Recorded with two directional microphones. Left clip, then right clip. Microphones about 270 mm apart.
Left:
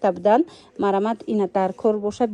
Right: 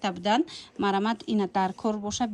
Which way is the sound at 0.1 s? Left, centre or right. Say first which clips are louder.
Left 8 dB; centre.